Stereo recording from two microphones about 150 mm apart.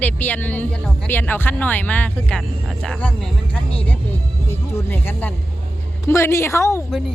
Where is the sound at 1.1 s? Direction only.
15° left (ahead or behind).